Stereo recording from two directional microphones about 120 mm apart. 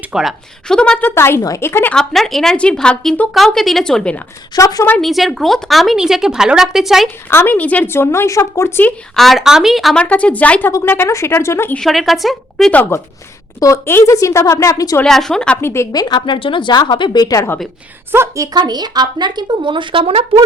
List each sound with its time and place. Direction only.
0.1 s speech: 5° right (ahead or behind); by 2.0 s 15° left (ahead or behind)
2.0 s speech: 5° left (ahead or behind)
4.5 s a woman's voice: 30° left (ahead or behind)
4.9 s speech: centre (ahead or behind)
7.3 s a woman's voice: 20° left (ahead or behind)
9.1 s speech: centre (ahead or behind)
10.7 s a woman's voice: 20° left (ahead or behind)
11.8 s speech: centre (ahead or behind)
12.7 s a woman's voice: 15° left (ahead or behind)
15.0 s speech: 5° left (ahead or behind)
15.6 s a woman's voice: 20° left (ahead or behind)
15.9 s speech: 35° left (ahead or behind)
18.1 s a woman's voice: 20° right (ahead or behind)
18.5 s a woman's voice: 35° right (ahead or behind)